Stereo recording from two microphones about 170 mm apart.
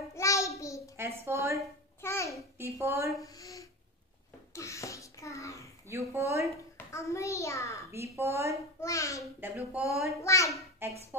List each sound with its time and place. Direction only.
0.1 s a sound: 20° left (ahead or behind)
1.2 s a woman's voice: 15° right (ahead or behind)
2.0 s babbling: 15° left (ahead or behind)
2.6 s a woman's voice: 15° right (ahead or behind)
3.2 s speech: 20° left (ahead or behind)
4.6 s a sound: 15° left (ahead or behind)
5.9 s a woman's voice: 15° right (ahead or behind)
6.9 s a child's voice: 15° left (ahead or behind)
7.9 s a woman's voice: 15° right (ahead or behind)
8.8 s a child's voice: 20° left (ahead or behind)
9.7 s speech: 5° right (ahead or behind)
10.2 s a child's voice: 15° left (ahead or behind)
10.5 s a child's voice: 15° right (ahead or behind)